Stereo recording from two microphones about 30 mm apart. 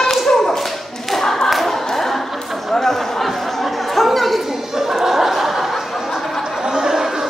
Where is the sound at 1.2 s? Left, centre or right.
Centre.